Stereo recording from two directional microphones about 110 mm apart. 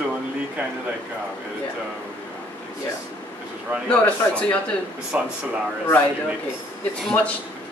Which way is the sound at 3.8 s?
10° left (ahead or behind).